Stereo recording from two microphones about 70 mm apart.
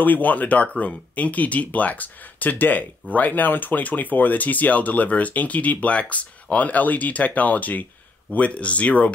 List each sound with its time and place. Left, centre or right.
0.0 s speech: left